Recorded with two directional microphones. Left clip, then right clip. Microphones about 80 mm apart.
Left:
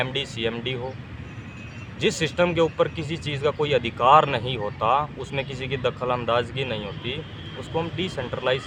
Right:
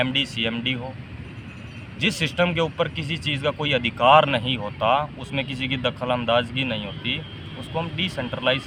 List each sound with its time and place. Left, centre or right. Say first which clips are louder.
0.0 s speech: right 3 dB; left
2.0 s speech: even; left